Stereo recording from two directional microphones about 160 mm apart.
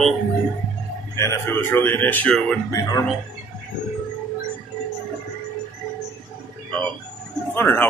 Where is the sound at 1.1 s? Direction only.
15° left (ahead or behind).